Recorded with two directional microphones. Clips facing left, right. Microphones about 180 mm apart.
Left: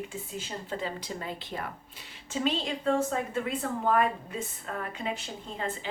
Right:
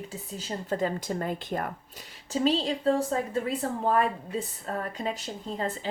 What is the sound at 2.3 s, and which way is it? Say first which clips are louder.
A woman's voice: right 4 dB; 35° right (ahead or behind).